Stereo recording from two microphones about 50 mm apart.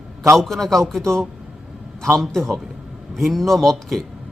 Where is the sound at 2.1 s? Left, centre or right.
Centre.